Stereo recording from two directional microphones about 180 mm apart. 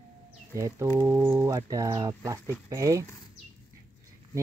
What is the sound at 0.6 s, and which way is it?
Speech, 15° right (ahead or behind).